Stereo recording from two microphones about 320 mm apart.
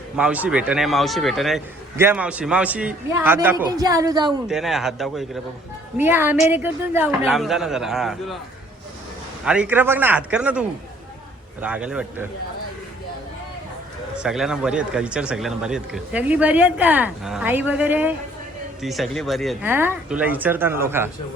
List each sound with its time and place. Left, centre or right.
0.2 s a man's voice: centre
4.3 s a man's voice: centre
9.4 s a man's voice: centre
14.2 s a man's voice: centre